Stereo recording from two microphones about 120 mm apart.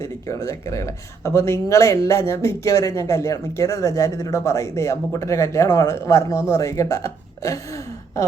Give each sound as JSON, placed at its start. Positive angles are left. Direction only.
{"t": 0.0, "sound": "speech", "side_deg": 25}